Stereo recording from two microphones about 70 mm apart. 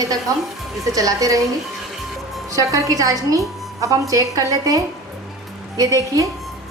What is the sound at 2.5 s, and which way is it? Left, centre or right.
A woman's voice, right.